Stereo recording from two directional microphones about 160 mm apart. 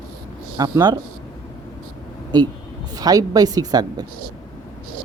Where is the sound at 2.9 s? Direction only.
20° right (ahead or behind).